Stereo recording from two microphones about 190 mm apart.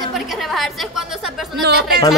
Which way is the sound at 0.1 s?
Centre (ahead or behind).